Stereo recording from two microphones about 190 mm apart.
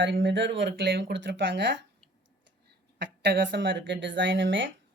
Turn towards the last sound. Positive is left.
turn(degrees=-75)  # may be behind; listen again after turning